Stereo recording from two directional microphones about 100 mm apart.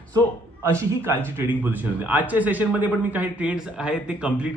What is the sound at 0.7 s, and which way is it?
A man's voice, 25° right (ahead or behind).